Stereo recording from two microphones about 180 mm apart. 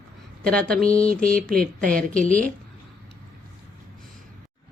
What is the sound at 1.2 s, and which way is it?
Mantra, 50° right (ahead or behind).